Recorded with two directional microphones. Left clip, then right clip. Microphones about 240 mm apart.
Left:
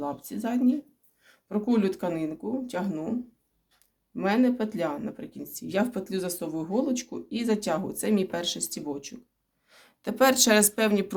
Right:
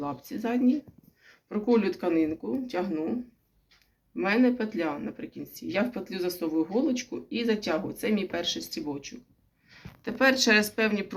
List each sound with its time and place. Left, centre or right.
0.0 s speech: left